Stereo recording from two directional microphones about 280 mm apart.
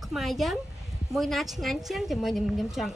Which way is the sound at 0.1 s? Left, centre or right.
Centre.